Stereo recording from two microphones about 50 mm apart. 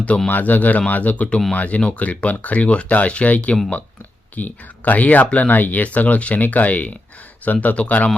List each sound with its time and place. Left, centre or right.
0.3 s speech: left